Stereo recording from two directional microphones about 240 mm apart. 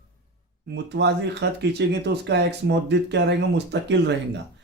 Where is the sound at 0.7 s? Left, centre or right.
Right.